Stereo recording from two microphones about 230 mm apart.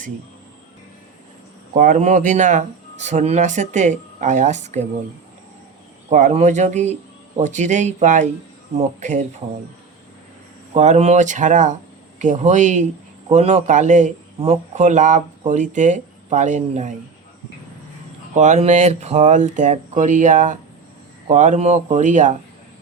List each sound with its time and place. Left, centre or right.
1.7 s speech: right
6.1 s speech: right
10.8 s speech: right
18.3 s speech: right